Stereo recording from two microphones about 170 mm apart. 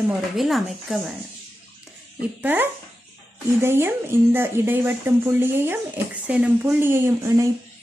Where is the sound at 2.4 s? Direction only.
10° right (ahead or behind).